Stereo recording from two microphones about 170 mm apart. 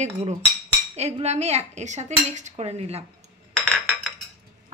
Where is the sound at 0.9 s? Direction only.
40° right (ahead or behind).